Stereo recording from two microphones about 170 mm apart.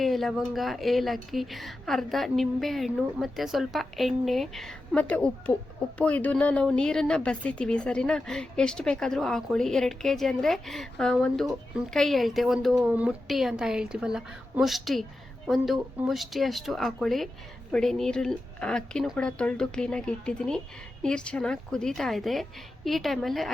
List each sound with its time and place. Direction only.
0.0 s speech: centre (ahead or behind)